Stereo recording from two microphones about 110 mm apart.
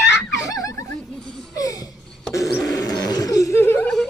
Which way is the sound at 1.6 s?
35° left (ahead or behind).